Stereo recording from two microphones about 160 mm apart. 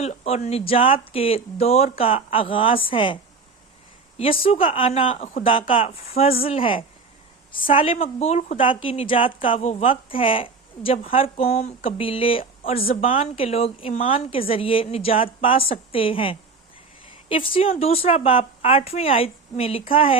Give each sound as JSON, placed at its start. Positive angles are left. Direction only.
{"t": 0.0, "sound": "speech", "side_deg": 45}
{"t": 4.2, "sound": "speech", "side_deg": 35}
{"t": 8.5, "sound": "speech", "side_deg": 35}